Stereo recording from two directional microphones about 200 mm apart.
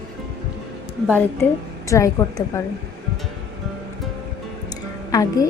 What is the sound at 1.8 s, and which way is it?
Speech, 15° left (ahead or behind).